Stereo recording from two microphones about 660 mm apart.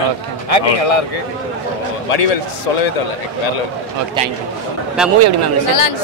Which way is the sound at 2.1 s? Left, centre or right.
Left.